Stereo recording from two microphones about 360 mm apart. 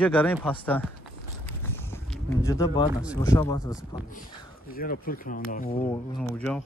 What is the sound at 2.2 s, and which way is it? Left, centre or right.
Speech, centre.